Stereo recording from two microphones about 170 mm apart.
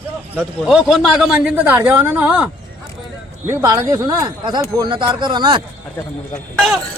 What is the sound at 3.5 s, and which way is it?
Speech, 20° right (ahead or behind).